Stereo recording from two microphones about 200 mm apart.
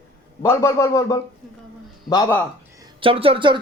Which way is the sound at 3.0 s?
30° right (ahead or behind).